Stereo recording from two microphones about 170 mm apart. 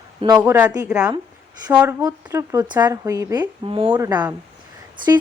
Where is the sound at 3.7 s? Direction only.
30° right (ahead or behind).